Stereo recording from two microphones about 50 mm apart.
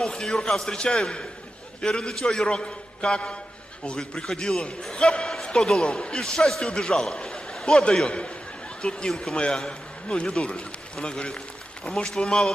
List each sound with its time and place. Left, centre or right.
0.0 s a man's voice: centre
4.3 s speech: centre
4.8 s a man's voice: centre
7.5 s a sound: centre
8.8 s a man's voice: centre